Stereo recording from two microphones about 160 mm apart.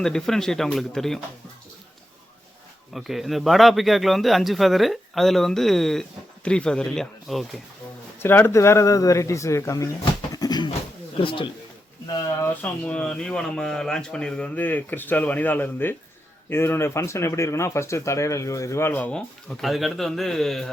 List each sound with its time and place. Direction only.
0.0 s speech: 5° left (ahead or behind)
2.9 s speech: centre (ahead or behind)
8.2 s speech: 15° left (ahead or behind); by 11.4 s 30° left (ahead or behind)
12.1 s a sound: 25° left (ahead or behind)
12.6 s speech: 5° left (ahead or behind)